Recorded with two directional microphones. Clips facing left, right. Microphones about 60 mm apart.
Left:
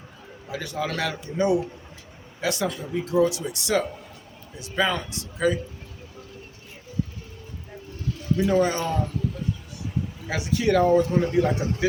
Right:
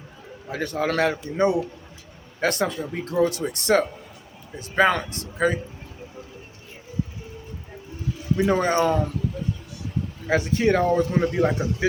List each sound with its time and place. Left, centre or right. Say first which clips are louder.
0.5 s speech: right 5 dB; right
2.4 s speech: right 3 dB; right
8.4 s speech: right 1 dB; right
10.2 s speech: right 4 dB; right